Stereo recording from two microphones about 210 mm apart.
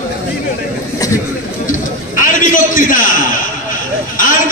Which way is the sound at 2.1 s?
40° left (ahead or behind).